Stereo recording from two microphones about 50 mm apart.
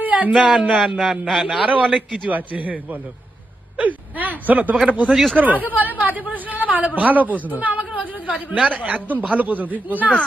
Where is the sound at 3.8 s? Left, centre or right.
Right.